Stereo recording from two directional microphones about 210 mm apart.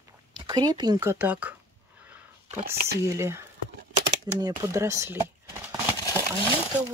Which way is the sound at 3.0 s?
15° right (ahead or behind).